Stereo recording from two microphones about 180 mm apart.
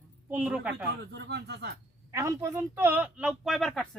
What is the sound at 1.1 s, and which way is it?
Speech, 70° right (ahead or behind).